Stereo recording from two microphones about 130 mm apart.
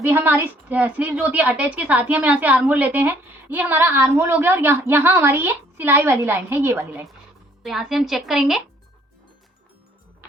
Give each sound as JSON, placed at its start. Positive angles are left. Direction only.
{"t": 0.1, "sound": "a woman's voice", "side_deg": -15}
{"t": 7.6, "sound": "a woman's voice", "side_deg": 0}